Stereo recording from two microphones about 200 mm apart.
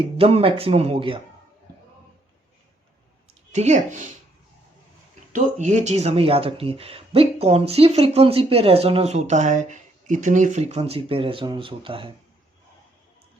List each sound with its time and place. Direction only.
0.0 s speech: 30° right (ahead or behind)
3.5 s speech: 35° right (ahead or behind)
5.3 s speech: 35° right (ahead or behind)